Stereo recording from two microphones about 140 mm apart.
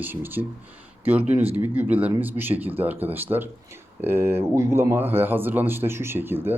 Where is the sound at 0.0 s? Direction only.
15° right (ahead or behind).